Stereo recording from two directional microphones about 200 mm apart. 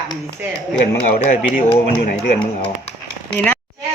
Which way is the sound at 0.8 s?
40° left (ahead or behind).